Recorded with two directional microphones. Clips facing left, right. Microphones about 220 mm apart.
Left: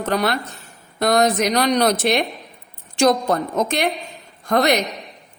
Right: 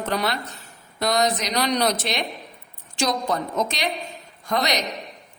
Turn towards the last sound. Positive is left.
turn(degrees=55)  # may be behind; listen again after turning